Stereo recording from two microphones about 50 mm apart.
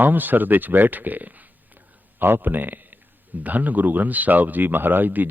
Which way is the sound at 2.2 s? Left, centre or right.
Right.